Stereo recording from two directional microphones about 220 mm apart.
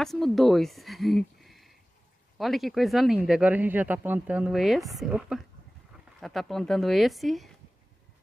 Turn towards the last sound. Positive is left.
turn(degrees=0)  # may be behind; listen again after turning